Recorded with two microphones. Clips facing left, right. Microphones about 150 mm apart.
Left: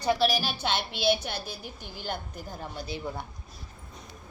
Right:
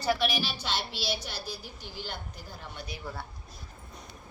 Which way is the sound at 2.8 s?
20° left (ahead or behind).